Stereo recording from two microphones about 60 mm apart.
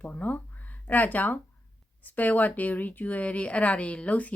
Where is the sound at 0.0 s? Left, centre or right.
Left.